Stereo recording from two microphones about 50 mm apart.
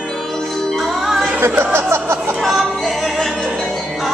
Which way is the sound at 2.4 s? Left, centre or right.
Centre.